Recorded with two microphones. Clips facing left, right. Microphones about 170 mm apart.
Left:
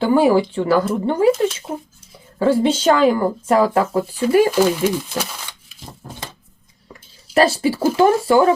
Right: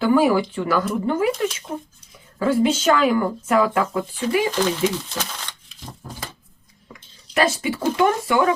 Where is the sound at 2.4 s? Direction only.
30° left (ahead or behind).